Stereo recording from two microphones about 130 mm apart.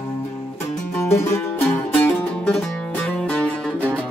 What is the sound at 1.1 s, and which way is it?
Music, 15° left (ahead or behind).